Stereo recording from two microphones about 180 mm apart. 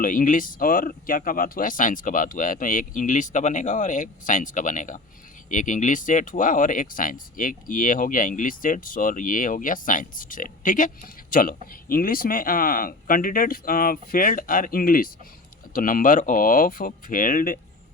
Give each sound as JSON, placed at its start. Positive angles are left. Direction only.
{"t": 0.0, "sound": "speech", "side_deg": 50}